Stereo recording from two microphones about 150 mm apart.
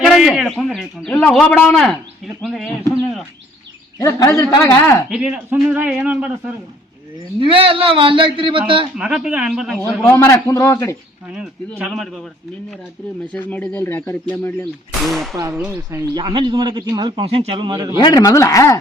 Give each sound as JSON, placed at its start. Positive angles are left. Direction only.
{"t": 0.0, "sound": "a man's voice", "side_deg": 0}
{"t": 3.9, "sound": "a man's voice", "side_deg": 20}
{"t": 5.0, "sound": "a man's voice", "side_deg": -5}
{"t": 7.3, "sound": "a man's voice", "side_deg": -35}
{"t": 9.0, "sound": "a man's voice", "side_deg": -5}
{"t": 10.1, "sound": "a man's voice", "side_deg": 15}
{"t": 11.3, "sound": "a man's voice", "side_deg": 0}
{"t": 13.3, "sound": "speech", "side_deg": 10}
{"t": 15.0, "sound": "a man's voice", "side_deg": 0}
{"t": 15.5, "sound": "a man's voice", "side_deg": -15}
{"t": 16.1, "sound": "a man's voice", "side_deg": -30}
{"t": 18.0, "sound": "a man's voice", "side_deg": 25}